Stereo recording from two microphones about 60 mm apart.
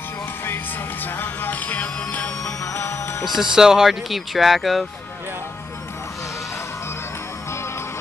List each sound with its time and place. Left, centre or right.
1.0 s music: left
2.7 s music: left
3.3 s speech: centre